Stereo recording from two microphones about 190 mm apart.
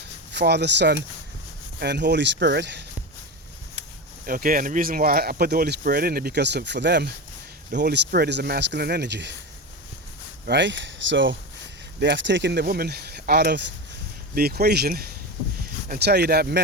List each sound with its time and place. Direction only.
0.3 s speech: 60° right (ahead or behind)
4.3 s speech: 50° right (ahead or behind); by 9.3 s 65° right (ahead or behind)
10.4 s speech: 65° right (ahead or behind)